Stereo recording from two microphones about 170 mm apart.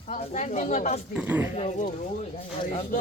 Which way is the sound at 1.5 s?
40° left (ahead or behind).